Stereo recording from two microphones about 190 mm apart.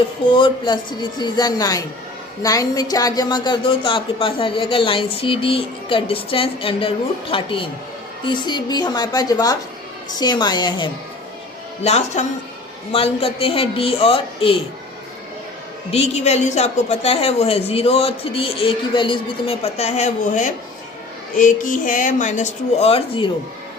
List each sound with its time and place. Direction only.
0.3 s a woman's voice: 25° left (ahead or behind)
11.8 s a woman's voice: 35° left (ahead or behind)
15.9 s a woman's voice: 35° left (ahead or behind)